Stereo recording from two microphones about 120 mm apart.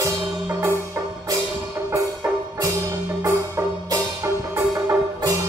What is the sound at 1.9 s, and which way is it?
Music, 20° right (ahead or behind).